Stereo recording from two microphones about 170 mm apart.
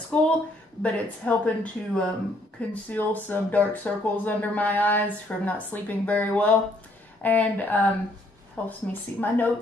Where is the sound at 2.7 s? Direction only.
10° left (ahead or behind).